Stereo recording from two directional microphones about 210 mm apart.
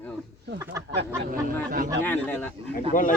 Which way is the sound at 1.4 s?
40° right (ahead or behind).